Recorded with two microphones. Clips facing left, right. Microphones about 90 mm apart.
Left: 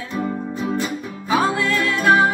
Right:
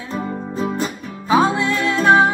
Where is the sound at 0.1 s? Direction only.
35° right (ahead or behind).